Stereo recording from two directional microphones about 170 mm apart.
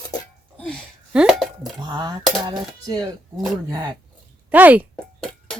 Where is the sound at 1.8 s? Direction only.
25° right (ahead or behind).